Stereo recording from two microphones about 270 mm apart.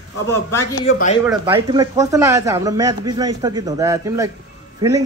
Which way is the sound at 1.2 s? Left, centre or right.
Centre.